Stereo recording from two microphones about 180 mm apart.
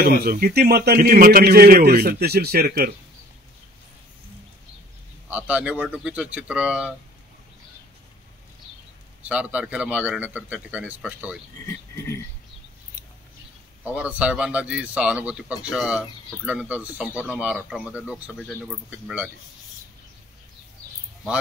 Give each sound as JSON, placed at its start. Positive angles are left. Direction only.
{"t": 0.2, "sound": "a man's voice", "side_deg": -55}
{"t": 5.3, "sound": "a man's voice", "side_deg": -5}
{"t": 9.2, "sound": "a man's voice", "side_deg": -5}
{"t": 11.6, "sound": "speech", "side_deg": 15}
{"t": 13.8, "sound": "a man's voice", "side_deg": -5}